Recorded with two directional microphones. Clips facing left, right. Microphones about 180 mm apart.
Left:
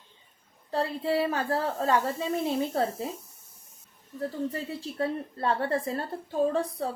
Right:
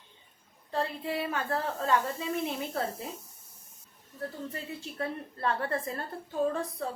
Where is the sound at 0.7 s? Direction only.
35° left (ahead or behind).